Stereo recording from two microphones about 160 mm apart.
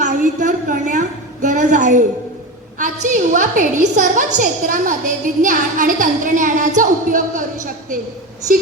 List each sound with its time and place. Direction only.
0.0 s a woman's voice: 50° right (ahead or behind)